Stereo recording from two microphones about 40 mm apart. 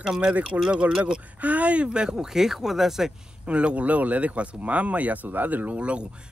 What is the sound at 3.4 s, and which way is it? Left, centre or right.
Speech, right.